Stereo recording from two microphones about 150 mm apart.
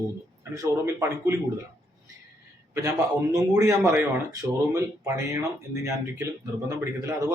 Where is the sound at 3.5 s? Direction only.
20° right (ahead or behind).